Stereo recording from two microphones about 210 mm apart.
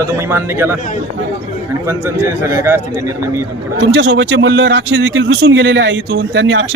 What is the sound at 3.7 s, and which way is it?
A man's voice, 60° right (ahead or behind).